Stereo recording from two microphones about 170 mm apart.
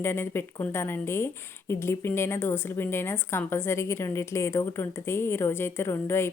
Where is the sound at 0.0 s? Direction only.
15° left (ahead or behind).